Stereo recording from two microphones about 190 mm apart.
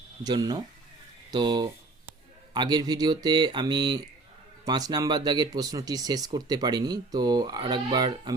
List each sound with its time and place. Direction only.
0.3 s speech: 20° right (ahead or behind)